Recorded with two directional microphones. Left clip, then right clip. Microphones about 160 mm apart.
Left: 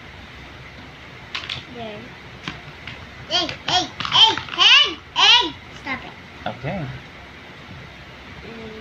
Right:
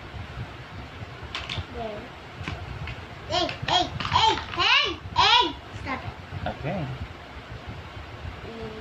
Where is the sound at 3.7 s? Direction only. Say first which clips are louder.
Left 4 dB; 15° right (ahead or behind).